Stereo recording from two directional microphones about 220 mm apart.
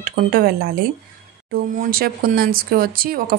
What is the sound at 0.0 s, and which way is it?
Speech, 45° right (ahead or behind).